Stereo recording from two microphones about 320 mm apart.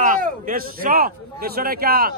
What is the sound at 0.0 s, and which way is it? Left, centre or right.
Speech, right.